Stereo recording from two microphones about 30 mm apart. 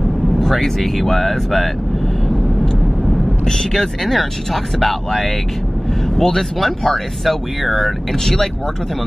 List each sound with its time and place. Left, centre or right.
0.4 s speech: centre
3.4 s speech: centre
7.2 s speech: centre